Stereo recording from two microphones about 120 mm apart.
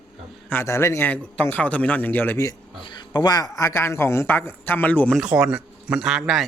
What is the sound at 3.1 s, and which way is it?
Speech, 35° left (ahead or behind).